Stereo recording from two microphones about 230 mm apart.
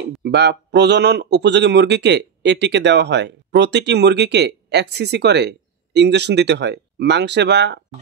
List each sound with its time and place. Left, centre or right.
0.2 s speech: right